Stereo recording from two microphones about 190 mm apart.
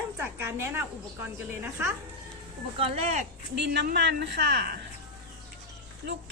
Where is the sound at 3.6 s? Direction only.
60° right (ahead or behind).